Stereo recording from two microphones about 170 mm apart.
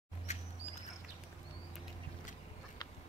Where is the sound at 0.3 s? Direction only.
40° left (ahead or behind).